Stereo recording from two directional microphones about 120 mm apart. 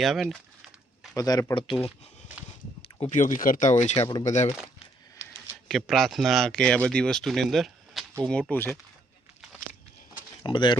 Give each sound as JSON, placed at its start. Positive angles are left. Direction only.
{"t": 0.0, "sound": "speech", "side_deg": 0}
{"t": 1.1, "sound": "speech", "side_deg": 30}
{"t": 3.0, "sound": "speech", "side_deg": 85}
{"t": 5.6, "sound": "speech", "side_deg": 0}
{"t": 8.3, "sound": "speech", "side_deg": 10}
{"t": 10.4, "sound": "speech", "side_deg": 40}